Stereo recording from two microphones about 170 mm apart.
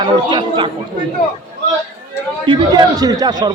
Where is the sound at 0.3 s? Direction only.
25° right (ahead or behind).